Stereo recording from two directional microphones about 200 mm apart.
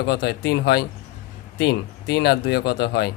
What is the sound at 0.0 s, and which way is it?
Speech, 60° left (ahead or behind).